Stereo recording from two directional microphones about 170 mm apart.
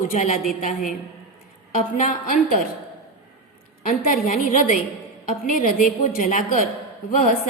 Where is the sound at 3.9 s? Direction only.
50° left (ahead or behind).